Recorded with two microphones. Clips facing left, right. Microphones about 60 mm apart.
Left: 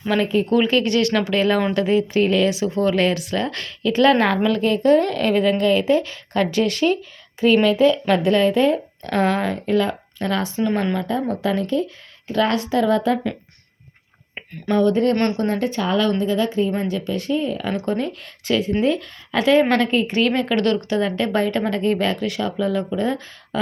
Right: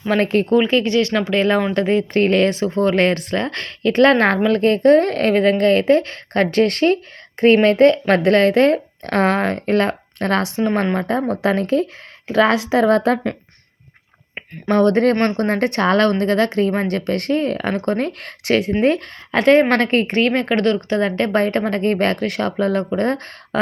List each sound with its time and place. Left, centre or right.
0.1 s speech: right
12.9 s a woman's voice: right
14.7 s speech: right
15.1 s speech: right
15.4 s speech: right
18.8 s speech: right
20.2 s speech: right
20.5 s speech: right
20.9 s speech: right